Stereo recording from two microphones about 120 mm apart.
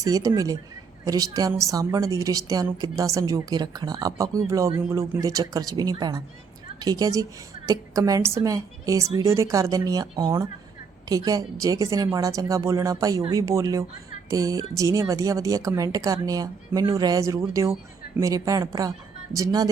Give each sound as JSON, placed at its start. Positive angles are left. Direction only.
{"t": 0.0, "sound": "a woman's voice", "side_deg": -30}